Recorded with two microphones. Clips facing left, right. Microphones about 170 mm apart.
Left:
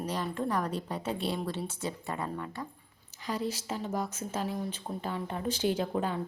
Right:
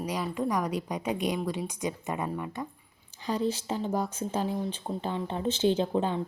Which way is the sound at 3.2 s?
30° right (ahead or behind).